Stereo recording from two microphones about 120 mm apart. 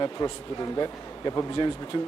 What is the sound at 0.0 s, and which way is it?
A man's voice, 35° left (ahead or behind).